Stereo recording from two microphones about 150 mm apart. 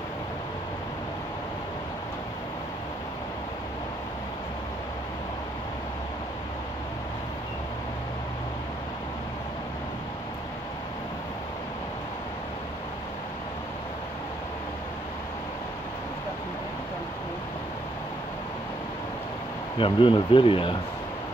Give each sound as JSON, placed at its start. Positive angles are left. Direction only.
{"t": 19.8, "sound": "speech", "side_deg": 35}